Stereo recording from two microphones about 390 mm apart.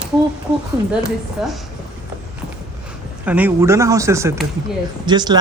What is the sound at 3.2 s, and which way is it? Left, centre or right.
Speech, centre.